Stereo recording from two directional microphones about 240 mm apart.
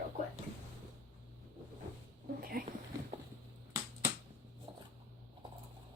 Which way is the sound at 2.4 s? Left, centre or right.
Right.